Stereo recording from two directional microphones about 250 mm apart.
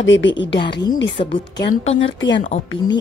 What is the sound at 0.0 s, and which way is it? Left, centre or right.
Speech, left.